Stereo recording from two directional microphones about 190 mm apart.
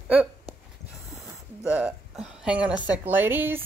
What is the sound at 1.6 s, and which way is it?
A woman's voice, 5° right (ahead or behind).